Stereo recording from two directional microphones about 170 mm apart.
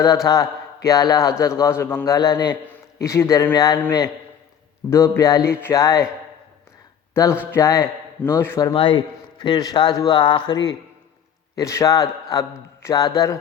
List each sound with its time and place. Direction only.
0.3 s a man's voice: 20° left (ahead or behind)
7.1 s a man's voice: 15° left (ahead or behind)
8.7 s a man's voice: 30° left (ahead or behind)